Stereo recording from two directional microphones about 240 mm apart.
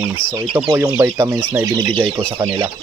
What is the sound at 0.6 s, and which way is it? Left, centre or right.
Speech, centre.